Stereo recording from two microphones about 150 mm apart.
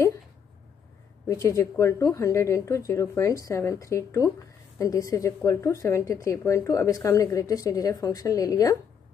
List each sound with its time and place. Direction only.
1.2 s a woman's voice: 20° left (ahead or behind)